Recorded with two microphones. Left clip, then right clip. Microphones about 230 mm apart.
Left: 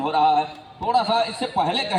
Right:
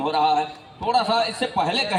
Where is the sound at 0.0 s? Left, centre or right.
Right.